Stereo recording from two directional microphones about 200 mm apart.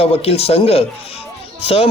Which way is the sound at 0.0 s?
30° left (ahead or behind).